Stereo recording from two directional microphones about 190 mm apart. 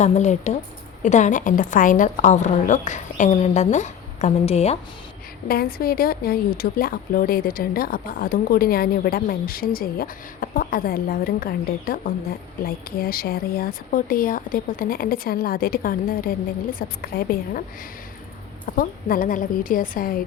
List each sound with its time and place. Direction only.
0.0 s a woman's voice: 40° left (ahead or behind)
5.5 s a woman's voice: 50° left (ahead or behind)
18.6 s a woman's voice: 50° left (ahead or behind)